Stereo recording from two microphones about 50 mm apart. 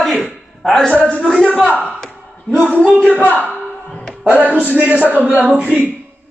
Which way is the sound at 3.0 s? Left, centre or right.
Left.